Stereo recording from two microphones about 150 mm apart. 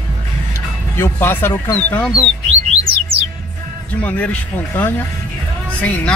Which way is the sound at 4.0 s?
10° left (ahead or behind).